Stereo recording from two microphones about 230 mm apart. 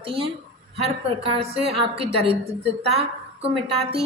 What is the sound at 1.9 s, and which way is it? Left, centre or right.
A woman's voice, right.